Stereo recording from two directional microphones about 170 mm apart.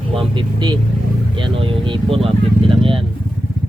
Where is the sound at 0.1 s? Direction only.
30° right (ahead or behind).